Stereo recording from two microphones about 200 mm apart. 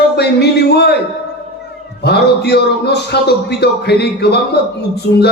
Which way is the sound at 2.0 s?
55° left (ahead or behind).